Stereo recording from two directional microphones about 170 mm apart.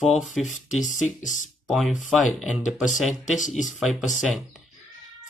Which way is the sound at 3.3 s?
45° left (ahead or behind).